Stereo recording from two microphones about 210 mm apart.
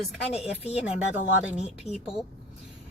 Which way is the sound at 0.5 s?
30° left (ahead or behind).